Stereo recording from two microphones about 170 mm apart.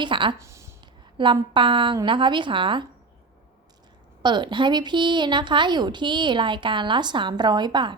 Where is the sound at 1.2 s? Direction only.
30° right (ahead or behind).